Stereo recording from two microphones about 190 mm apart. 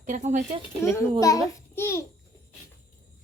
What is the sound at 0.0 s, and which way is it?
Speech, 40° right (ahead or behind).